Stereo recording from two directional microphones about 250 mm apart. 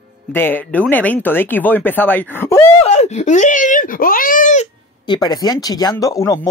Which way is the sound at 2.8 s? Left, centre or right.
Left.